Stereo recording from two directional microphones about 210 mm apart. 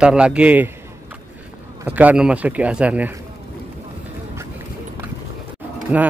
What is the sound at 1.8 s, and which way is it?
A man's voice, 10° right (ahead or behind).